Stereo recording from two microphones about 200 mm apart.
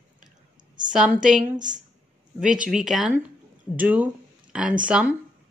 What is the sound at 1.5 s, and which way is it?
Speech, 40° right (ahead or behind).